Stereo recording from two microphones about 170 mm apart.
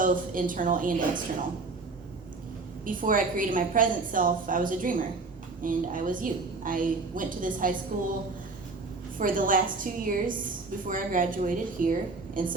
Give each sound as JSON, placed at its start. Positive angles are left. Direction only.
{"t": 0.0, "sound": "a woman's voice", "side_deg": -55}
{"t": 2.8, "sound": "a woman's voice", "side_deg": -55}
{"t": 9.1, "sound": "a woman's voice", "side_deg": -55}